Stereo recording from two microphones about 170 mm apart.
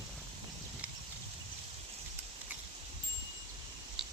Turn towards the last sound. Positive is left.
turn(degrees=-5)  # may be behind; listen again after turning